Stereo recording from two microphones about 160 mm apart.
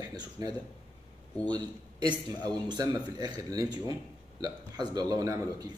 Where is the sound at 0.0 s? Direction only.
25° right (ahead or behind).